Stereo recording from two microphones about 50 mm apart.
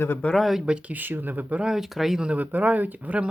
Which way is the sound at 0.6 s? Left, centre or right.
Centre.